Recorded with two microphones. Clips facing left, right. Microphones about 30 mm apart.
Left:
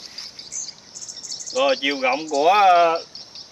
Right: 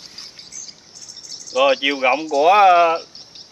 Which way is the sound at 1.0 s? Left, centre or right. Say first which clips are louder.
Left 2 dB; right.